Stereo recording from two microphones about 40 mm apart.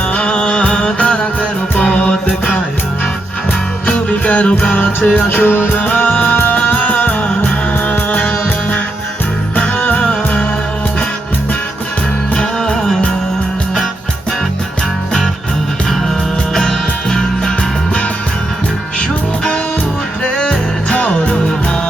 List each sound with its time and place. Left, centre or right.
0.1 s music: left
1.7 s music: left
3.8 s music: left
4.9 s music: left
5.1 s music: left
5.7 s music: left
9.7 s music: left
10.0 s music: left
12.3 s music: left
12.7 s music: centre
16.6 s music: centre
20.3 s music: centre
20.9 s music: left